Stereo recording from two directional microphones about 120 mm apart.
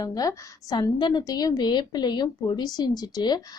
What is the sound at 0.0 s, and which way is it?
A woman's voice, 30° left (ahead or behind).